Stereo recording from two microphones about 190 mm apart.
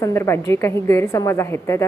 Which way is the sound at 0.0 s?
15° left (ahead or behind).